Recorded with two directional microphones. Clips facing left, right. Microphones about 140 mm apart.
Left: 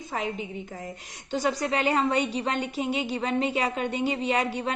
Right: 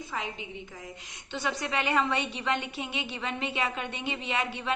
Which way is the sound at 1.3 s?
40° left (ahead or behind).